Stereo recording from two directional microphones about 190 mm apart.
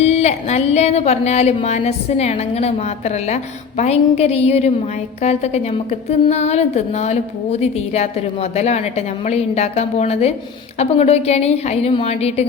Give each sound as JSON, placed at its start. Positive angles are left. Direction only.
{"t": 0.0, "sound": "a woman's voice", "side_deg": 35}